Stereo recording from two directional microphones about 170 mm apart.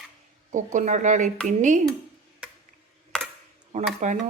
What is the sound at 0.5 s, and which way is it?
Speech, 45° right (ahead or behind).